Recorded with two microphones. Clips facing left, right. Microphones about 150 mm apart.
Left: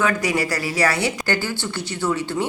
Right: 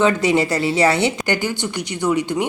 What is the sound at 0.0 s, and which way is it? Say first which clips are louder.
Speech: right 5 dB; 25° right (ahead or behind).